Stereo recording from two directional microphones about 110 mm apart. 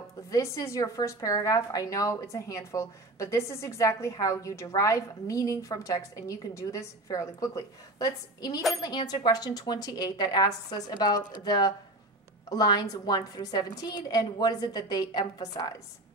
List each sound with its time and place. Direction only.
0.3 s a woman's voice: 30° left (ahead or behind)